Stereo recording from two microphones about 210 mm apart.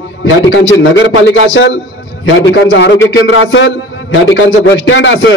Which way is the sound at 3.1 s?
60° left (ahead or behind).